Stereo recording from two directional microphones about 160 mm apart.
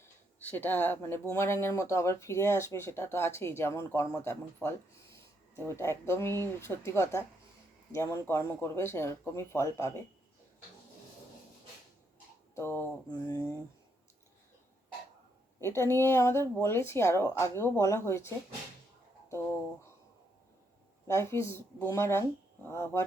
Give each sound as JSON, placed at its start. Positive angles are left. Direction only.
{"t": 0.5, "sound": "speech", "side_deg": 10}
{"t": 12.5, "sound": "speech", "side_deg": 15}
{"t": 15.6, "sound": "speech", "side_deg": 15}
{"t": 19.3, "sound": "a sound", "side_deg": 15}
{"t": 21.1, "sound": "speech", "side_deg": 15}